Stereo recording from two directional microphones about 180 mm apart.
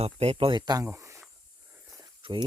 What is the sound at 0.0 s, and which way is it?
Speech, 35° right (ahead or behind).